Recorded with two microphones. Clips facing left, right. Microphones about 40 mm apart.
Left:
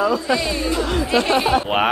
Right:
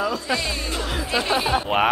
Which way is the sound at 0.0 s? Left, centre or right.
Centre.